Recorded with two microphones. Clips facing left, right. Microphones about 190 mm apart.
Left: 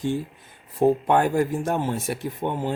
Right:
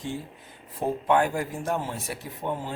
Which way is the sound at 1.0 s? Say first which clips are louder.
Left 3 dB; 45° left (ahead or behind).